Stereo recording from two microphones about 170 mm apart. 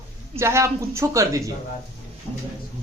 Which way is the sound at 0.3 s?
15° right (ahead or behind).